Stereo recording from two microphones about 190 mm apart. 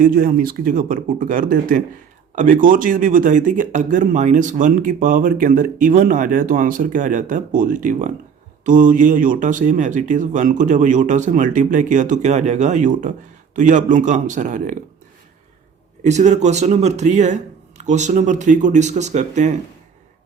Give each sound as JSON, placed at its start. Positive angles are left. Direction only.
{"t": 0.0, "sound": "speech", "side_deg": -50}
{"t": 16.0, "sound": "speech", "side_deg": -40}